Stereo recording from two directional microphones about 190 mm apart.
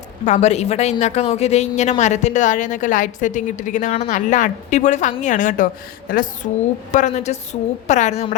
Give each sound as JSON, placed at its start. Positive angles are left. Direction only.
{"t": 0.3, "sound": "a woman's voice", "side_deg": 35}